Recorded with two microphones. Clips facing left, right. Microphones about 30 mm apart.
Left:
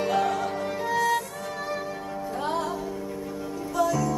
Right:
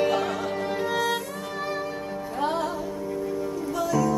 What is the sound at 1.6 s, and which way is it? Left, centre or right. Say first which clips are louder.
Music: right 2 dB; right.